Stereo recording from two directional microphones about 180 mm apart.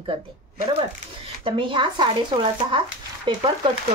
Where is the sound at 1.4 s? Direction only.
25° right (ahead or behind).